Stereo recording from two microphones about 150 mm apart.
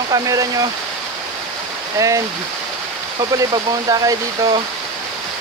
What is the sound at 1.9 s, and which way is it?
Speech, 20° right (ahead or behind).